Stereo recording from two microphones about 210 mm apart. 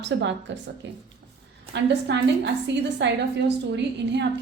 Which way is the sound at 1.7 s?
55° right (ahead or behind).